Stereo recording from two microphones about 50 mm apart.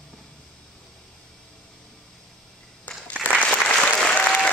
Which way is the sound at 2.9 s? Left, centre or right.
Left.